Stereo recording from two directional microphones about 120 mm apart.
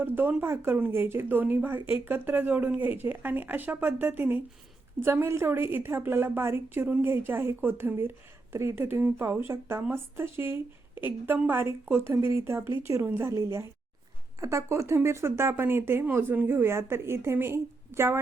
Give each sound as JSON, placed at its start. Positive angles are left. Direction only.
{"t": 0.0, "sound": "speech", "side_deg": -15}
{"t": 11.5, "sound": "speech", "side_deg": -20}